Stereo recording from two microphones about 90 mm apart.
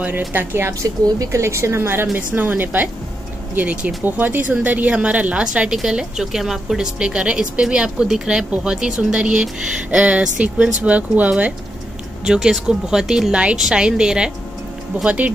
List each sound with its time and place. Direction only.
0.3 s a woman's voice: 20° right (ahead or behind)